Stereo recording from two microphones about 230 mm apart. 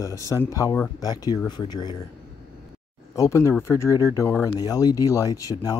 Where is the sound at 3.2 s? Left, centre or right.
Centre.